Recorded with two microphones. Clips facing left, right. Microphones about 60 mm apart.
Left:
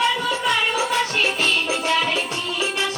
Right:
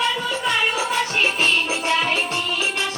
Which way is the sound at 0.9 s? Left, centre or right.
Centre.